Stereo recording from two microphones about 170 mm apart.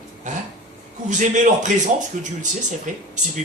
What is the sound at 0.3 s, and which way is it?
Speech, 45° right (ahead or behind).